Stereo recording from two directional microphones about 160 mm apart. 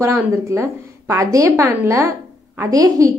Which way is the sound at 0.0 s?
20° right (ahead or behind).